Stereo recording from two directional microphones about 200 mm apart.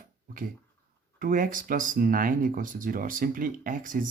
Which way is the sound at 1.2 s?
45° right (ahead or behind).